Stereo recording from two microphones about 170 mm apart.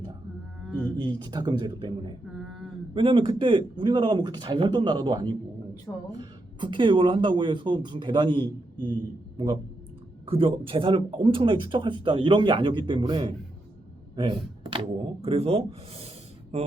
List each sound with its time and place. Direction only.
0.6 s music: 10° left (ahead or behind)
0.9 s speech: 25° right (ahead or behind)
2.3 s a sound: centre (ahead or behind)
2.9 s speech: 30° right (ahead or behind)
10.2 s speech: 30° right (ahead or behind)